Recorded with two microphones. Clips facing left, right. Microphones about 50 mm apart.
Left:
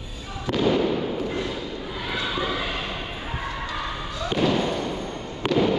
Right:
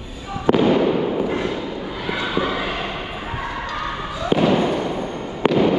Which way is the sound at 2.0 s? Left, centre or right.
Centre.